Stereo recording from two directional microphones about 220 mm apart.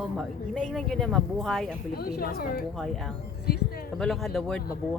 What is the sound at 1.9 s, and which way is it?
Speech, 45° left (ahead or behind).